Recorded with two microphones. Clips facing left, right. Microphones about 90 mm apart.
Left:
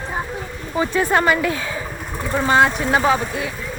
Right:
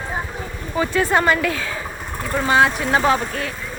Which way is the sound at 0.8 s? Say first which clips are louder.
Even; 20° left (ahead or behind).